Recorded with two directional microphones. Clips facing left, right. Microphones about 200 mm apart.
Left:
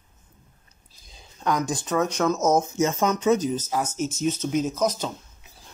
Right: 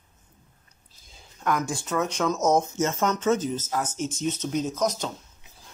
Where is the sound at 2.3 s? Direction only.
5° left (ahead or behind).